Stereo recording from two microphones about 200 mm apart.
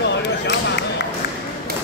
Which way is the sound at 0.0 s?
60° left (ahead or behind).